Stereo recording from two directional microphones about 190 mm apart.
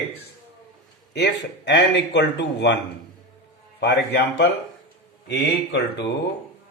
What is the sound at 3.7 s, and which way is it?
Speech, 60° left (ahead or behind).